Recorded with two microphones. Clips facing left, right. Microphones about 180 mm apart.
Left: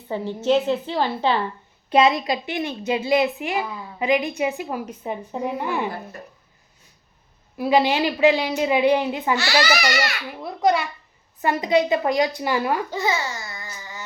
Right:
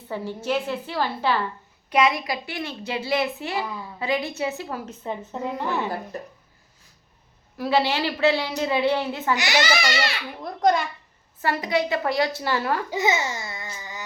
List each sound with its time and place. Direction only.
0.1 s a woman's voice: 20° left (ahead or behind)
7.6 s a woman's voice: 15° left (ahead or behind)
9.3 s a child's voice: 20° right (ahead or behind)
10.3 s a child's voice: 5° left (ahead or behind)
11.4 s a woman's voice: 20° left (ahead or behind)
12.9 s speech: 20° right (ahead or behind)